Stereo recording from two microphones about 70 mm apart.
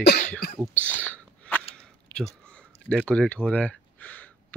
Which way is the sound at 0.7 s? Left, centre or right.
Left.